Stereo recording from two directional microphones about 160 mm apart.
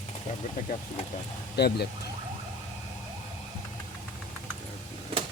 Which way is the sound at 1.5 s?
90° left.